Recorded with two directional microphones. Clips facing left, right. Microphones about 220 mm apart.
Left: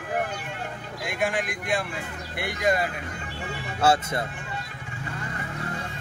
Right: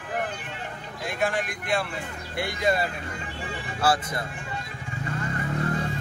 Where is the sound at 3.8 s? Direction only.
25° left (ahead or behind).